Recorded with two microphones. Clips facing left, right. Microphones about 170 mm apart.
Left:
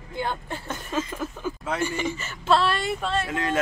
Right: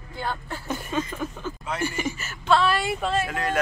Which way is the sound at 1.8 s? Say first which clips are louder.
Right 2 dB; 10° right (ahead or behind).